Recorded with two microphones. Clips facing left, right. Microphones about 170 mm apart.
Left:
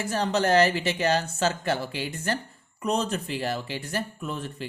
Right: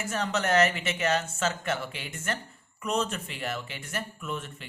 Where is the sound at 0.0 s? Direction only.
35° left (ahead or behind).